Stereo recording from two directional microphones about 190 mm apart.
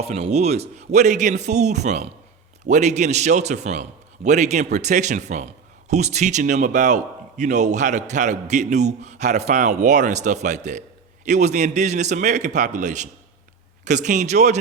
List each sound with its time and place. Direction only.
0.1 s a man's voice: 35° right (ahead or behind)